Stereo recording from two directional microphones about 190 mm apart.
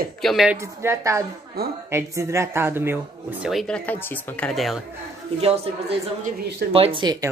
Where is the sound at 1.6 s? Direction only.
55° right (ahead or behind).